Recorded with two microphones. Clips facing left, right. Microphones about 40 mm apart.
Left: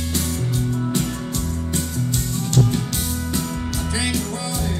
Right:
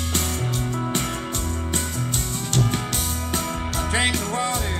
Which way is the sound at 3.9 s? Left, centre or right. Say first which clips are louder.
Right 3 dB; right.